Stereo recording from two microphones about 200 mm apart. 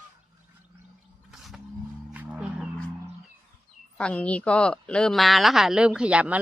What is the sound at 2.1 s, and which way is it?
Music, 5° right (ahead or behind).